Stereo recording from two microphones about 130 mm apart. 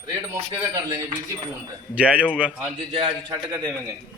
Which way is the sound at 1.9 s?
10° right (ahead or behind).